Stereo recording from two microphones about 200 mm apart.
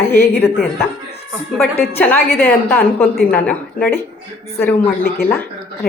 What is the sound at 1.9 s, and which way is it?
A woman's voice, 10° left (ahead or behind).